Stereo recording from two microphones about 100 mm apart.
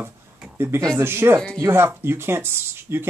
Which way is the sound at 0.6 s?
25° right (ahead or behind).